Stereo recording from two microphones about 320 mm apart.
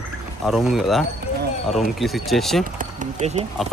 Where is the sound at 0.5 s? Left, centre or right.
Centre.